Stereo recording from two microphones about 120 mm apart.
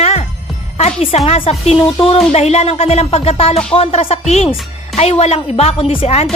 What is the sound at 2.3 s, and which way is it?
A woman's voice, 65° left (ahead or behind).